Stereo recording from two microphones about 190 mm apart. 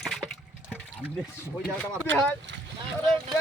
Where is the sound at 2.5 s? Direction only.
70° right (ahead or behind).